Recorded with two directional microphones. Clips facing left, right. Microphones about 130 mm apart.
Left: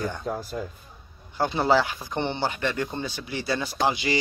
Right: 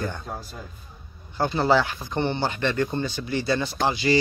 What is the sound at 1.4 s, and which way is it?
Speech, 10° left (ahead or behind).